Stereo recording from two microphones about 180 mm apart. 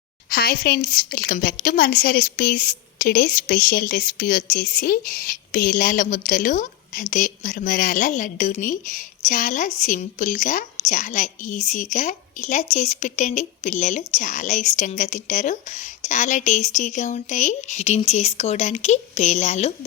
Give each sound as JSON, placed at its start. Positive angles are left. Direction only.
{"t": 0.3, "sound": "a woman's voice", "side_deg": 55}